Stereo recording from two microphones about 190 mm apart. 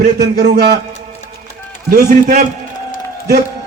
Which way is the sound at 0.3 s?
60° right (ahead or behind).